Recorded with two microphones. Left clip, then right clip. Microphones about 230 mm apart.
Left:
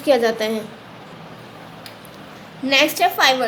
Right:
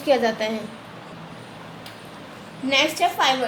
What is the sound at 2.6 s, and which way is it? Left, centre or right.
Speech, left.